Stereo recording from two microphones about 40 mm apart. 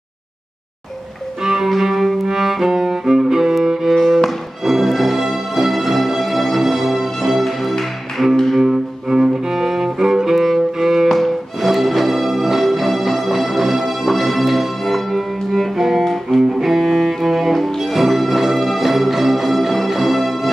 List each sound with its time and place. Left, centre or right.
1.4 s cello: centre
2.2 s music: centre
3.6 s cello: centre
3.9 s music: centre
8.6 s cello: centre
11.1 s music: centre
16.3 s music: centre